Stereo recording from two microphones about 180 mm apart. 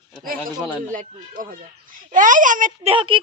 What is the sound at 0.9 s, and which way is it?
Speech, 50° right (ahead or behind).